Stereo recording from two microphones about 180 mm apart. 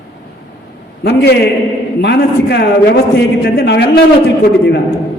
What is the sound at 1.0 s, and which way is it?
A man's voice, 65° left (ahead or behind).